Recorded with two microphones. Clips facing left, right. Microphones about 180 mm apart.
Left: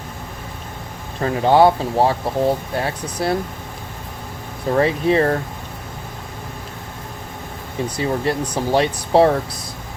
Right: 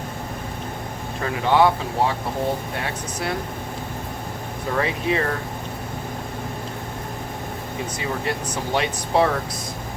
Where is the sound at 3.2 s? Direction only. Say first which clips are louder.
Left 7 dB; 35° left (ahead or behind).